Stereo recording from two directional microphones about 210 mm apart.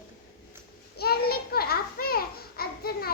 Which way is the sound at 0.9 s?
50° left (ahead or behind).